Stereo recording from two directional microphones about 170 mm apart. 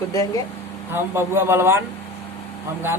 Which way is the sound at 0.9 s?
15° right (ahead or behind).